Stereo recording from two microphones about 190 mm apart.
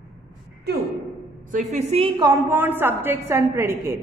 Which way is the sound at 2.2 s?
15° right (ahead or behind).